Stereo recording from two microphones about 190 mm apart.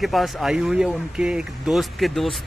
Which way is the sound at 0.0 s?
Centre (ahead or behind).